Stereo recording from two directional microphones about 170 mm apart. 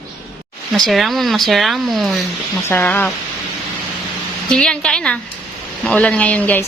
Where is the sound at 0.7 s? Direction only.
Centre (ahead or behind).